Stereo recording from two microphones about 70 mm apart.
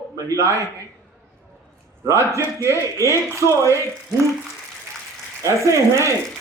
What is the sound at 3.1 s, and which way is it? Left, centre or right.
Speech, right.